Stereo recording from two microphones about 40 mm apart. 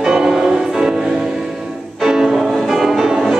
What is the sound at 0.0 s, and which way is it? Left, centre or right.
Music, centre.